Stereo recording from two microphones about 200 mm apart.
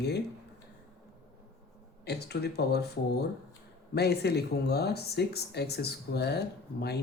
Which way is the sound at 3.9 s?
55° left (ahead or behind).